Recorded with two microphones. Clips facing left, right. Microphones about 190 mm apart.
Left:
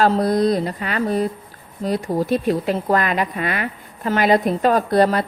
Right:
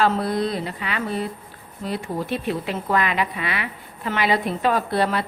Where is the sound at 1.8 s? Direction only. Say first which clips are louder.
Left 6 dB; 40° left (ahead or behind).